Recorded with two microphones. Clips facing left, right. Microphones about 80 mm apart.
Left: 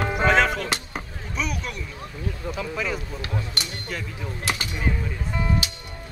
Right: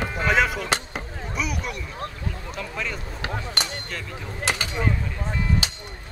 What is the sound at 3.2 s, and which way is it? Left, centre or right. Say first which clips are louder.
Speech: right 2 dB; right.